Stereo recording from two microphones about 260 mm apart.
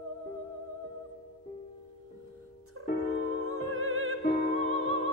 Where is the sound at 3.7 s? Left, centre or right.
Right.